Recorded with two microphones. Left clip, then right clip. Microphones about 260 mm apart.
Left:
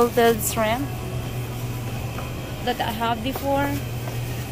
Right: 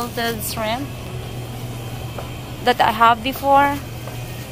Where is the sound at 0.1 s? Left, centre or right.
Centre.